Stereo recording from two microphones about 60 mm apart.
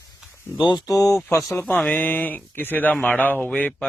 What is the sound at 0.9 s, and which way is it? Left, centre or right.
Speech, left.